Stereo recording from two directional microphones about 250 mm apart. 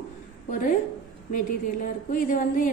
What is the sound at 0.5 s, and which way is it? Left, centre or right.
Speech, left.